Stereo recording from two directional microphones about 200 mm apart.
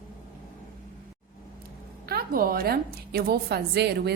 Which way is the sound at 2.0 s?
50° right (ahead or behind).